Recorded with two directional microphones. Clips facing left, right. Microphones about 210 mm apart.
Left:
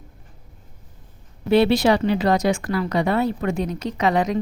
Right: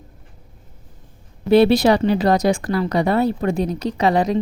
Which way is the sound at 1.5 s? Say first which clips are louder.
Right 3 dB; 40° right (ahead or behind).